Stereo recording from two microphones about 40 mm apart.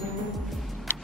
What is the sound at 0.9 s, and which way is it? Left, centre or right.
Vehicle, left.